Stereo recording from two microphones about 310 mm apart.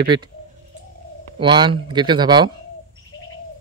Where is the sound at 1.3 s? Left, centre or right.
Centre.